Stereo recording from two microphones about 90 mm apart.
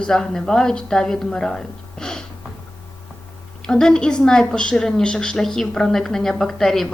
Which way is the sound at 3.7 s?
5° left (ahead or behind).